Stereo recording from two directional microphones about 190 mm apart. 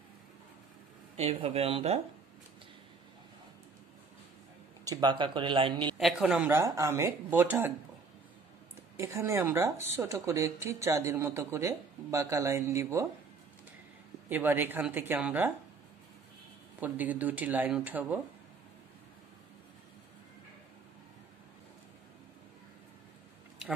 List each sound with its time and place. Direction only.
1.1 s speech: 30° right (ahead or behind)
4.8 s a man's voice: 20° right (ahead or behind)
5.9 s a woman's voice: centre (ahead or behind)
8.9 s a woman's voice: 15° right (ahead or behind)
14.3 s a woman's voice: 10° right (ahead or behind)
16.8 s a woman's voice: 10° right (ahead or behind)